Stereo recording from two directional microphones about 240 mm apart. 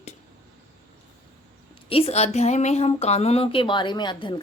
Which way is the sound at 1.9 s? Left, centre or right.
Left.